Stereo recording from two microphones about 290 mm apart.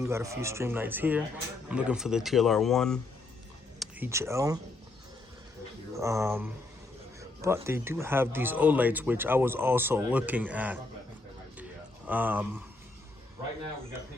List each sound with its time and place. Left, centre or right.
0.0 s speech: centre
6.0 s speech: centre
12.0 s speech: centre